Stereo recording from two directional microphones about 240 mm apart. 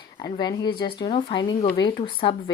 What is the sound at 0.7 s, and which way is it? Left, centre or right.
Speech, left.